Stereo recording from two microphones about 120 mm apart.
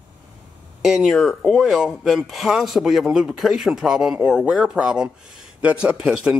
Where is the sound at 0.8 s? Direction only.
Centre (ahead or behind).